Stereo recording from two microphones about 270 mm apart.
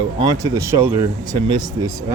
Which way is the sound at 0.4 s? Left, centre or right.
Centre.